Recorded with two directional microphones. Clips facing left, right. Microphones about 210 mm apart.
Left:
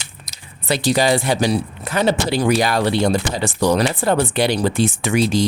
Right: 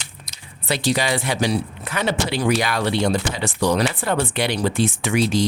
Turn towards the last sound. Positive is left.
turn(degrees=35)  # may be behind; listen again after turning